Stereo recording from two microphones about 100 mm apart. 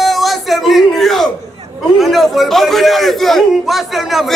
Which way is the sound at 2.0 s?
Centre (ahead or behind).